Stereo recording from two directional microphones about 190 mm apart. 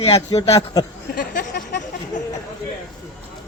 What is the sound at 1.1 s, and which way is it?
A man's voice, 50° left (ahead or behind).